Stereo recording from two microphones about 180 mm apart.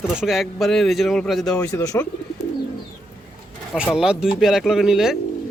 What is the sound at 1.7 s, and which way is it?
Speech, 20° left (ahead or behind).